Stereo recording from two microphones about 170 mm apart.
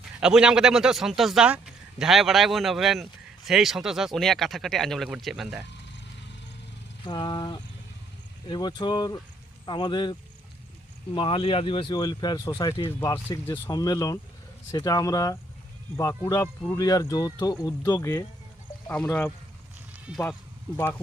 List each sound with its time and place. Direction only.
0.2 s speech: 5° right (ahead or behind)
7.0 s speech: 25° left (ahead or behind)